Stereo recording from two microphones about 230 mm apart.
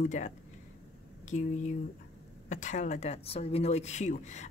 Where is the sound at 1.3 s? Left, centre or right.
Left.